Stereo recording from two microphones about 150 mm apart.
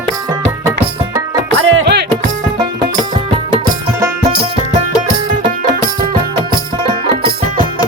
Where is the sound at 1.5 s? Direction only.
90° right.